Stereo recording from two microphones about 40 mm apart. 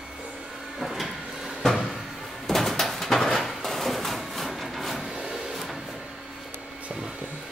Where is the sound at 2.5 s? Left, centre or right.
Centre.